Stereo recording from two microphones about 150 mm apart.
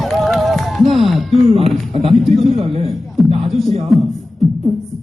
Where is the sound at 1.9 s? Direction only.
50° right (ahead or behind).